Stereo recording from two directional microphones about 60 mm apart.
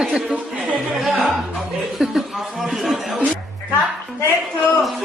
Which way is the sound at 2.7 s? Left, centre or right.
Centre.